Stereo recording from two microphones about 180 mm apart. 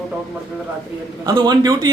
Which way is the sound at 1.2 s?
20° right (ahead or behind).